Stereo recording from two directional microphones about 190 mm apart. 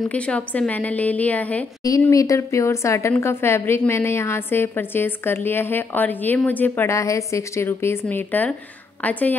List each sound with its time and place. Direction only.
0.1 s a woman's voice: 5° left (ahead or behind)